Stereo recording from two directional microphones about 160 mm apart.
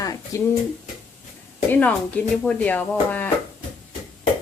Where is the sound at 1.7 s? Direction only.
10° left (ahead or behind).